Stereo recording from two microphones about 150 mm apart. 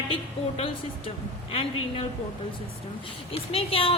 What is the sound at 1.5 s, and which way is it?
Speech, 40° left (ahead or behind).